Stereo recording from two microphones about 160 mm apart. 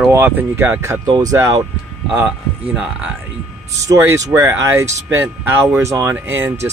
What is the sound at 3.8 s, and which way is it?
Speech, 20° right (ahead or behind).